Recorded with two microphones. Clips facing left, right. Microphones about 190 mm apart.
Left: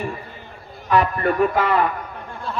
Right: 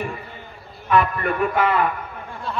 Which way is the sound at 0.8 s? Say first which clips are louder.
Left 1 dB; 40° left (ahead or behind).